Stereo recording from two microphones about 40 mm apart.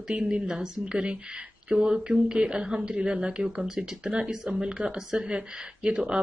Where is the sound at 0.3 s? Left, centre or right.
Right.